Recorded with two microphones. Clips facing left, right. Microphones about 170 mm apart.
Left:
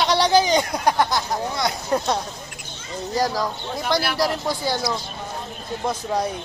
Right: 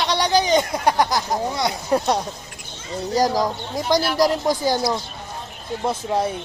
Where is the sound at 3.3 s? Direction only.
20° right (ahead or behind).